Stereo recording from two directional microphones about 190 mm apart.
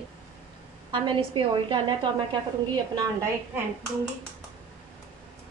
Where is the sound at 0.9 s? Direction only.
25° right (ahead or behind).